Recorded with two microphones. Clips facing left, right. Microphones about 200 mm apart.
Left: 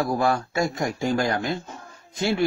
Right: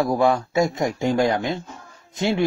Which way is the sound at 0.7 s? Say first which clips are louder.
Right 3 dB; 20° right (ahead or behind).